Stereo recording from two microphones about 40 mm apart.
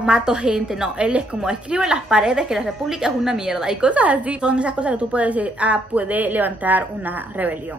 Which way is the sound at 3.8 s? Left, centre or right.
Right.